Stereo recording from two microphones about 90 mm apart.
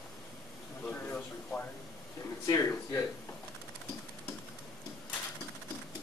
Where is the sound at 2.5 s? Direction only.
25° left (ahead or behind).